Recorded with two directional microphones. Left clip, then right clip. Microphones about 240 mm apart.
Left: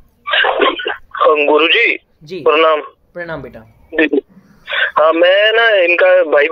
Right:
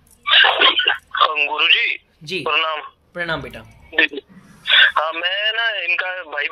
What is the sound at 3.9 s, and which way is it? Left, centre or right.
A man's voice, centre.